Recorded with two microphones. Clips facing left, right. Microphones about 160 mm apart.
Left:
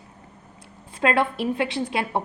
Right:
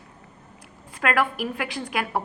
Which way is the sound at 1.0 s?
25° left (ahead or behind).